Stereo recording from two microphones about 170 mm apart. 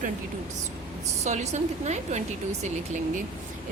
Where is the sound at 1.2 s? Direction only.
40° right (ahead or behind).